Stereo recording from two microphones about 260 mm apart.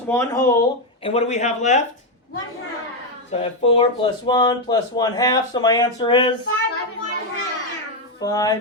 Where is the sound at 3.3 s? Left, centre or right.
Left.